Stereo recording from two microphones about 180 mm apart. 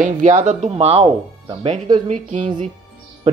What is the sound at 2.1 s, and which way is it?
Speech, 40° right (ahead or behind).